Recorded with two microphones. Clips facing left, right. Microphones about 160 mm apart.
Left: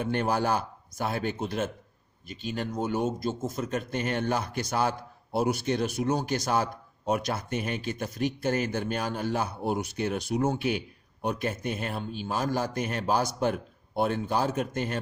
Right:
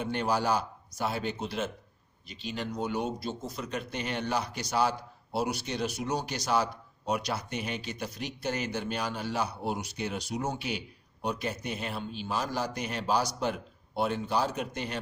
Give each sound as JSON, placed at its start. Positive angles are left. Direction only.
{"t": 0.0, "sound": "speech", "side_deg": 50}